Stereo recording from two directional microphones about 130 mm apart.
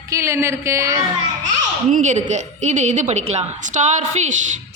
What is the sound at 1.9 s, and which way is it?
A woman's voice, 75° right (ahead or behind).